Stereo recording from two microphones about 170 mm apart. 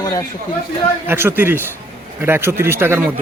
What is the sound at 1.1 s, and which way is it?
A man's voice, 15° right (ahead or behind).